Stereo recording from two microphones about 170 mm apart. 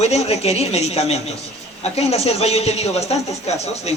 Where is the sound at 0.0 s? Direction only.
40° left (ahead or behind).